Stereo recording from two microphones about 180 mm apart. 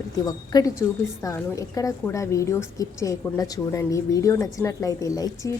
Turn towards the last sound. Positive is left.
turn(degrees=20)  # may be behind; listen again after turning